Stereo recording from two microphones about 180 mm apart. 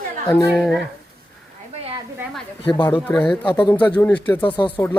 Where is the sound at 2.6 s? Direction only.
25° left (ahead or behind).